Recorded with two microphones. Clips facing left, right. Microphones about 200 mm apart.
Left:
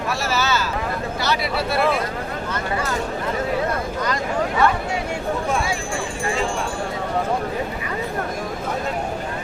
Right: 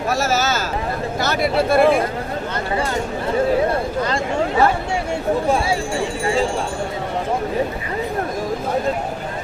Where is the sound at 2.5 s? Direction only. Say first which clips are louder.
Right 2 dB; 30° right (ahead or behind).